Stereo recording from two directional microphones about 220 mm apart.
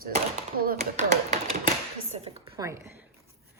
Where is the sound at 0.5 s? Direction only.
35° right (ahead or behind).